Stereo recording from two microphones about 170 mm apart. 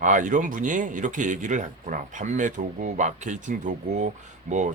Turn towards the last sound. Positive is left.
turn(degrees=-45)  # may be behind; listen again after turning